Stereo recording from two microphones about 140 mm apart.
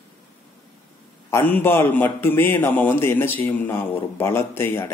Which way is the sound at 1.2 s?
15° left (ahead or behind).